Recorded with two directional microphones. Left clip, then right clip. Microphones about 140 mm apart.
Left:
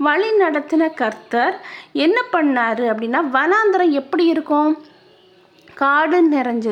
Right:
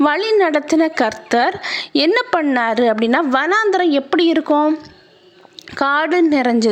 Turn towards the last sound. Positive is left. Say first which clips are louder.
# right 2 dB
turn(degrees=-30)  # may be behind; listen again after turning